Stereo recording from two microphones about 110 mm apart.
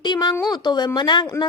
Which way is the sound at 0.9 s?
45° left (ahead or behind).